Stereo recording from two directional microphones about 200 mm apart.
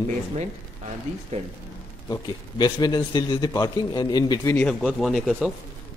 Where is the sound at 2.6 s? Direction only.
20° left (ahead or behind).